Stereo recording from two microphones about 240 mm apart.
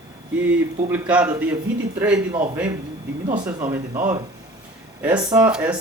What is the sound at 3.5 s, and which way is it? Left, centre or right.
Speech, centre.